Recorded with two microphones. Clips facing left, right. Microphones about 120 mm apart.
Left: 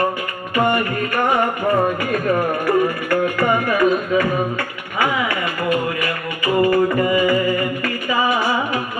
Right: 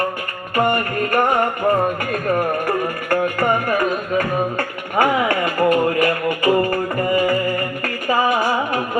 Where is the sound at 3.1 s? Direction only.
40° right (ahead or behind).